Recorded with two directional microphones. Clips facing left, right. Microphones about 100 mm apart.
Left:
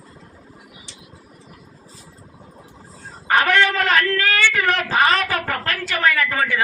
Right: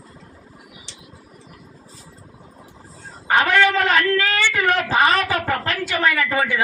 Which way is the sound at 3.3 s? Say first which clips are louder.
Right 1 dB; 20° right (ahead or behind).